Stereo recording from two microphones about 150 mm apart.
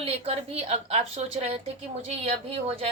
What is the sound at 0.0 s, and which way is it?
Speech, 40° right (ahead or behind).